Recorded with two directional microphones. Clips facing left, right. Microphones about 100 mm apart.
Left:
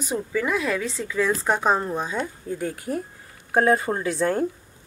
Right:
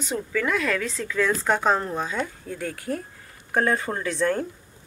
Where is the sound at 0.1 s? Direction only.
15° left (ahead or behind).